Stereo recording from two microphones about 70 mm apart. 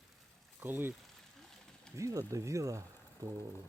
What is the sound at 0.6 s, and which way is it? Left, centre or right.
Speech, right.